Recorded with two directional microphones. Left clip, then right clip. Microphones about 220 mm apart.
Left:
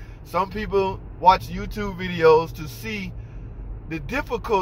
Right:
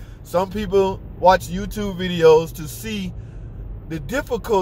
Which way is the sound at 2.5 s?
25° right (ahead or behind).